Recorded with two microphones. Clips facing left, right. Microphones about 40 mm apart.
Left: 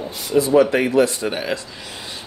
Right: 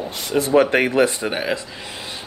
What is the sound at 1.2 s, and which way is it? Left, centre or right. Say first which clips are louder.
Speech: right 1 dB; centre.